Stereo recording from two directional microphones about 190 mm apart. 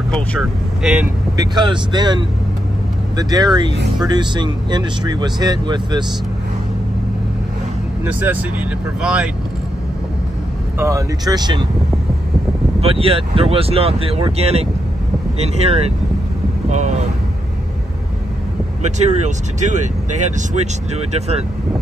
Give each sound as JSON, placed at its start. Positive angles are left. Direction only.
{"t": 0.1, "sound": "speech", "side_deg": 0}
{"t": 1.3, "sound": "speech", "side_deg": -20}
{"t": 8.0, "sound": "speech", "side_deg": -10}
{"t": 10.8, "sound": "speech", "side_deg": -15}
{"t": 12.8, "sound": "speech", "side_deg": -30}
{"t": 18.8, "sound": "speech", "side_deg": -35}